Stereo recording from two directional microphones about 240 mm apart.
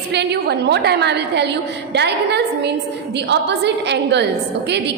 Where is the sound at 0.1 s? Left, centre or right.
Right.